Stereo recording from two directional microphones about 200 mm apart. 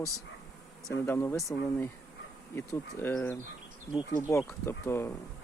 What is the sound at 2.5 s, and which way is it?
Speech, 10° left (ahead or behind).